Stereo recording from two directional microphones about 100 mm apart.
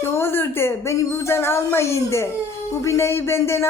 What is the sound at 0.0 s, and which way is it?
A woman's voice, 25° left (ahead or behind).